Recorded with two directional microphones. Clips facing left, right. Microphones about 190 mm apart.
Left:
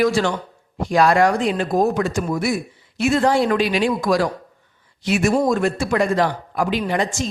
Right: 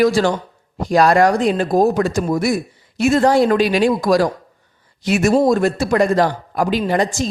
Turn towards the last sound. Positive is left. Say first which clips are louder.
# right 4 dB
turn(degrees=-40)  # may be behind; listen again after turning